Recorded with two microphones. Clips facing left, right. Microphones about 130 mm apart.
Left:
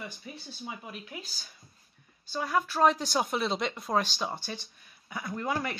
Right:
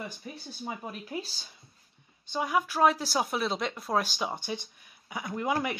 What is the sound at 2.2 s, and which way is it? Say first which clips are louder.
Speech: right 1 dB; 15° right (ahead or behind).